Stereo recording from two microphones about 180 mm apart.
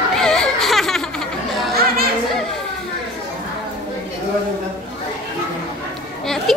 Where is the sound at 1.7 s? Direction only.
60° right (ahead or behind).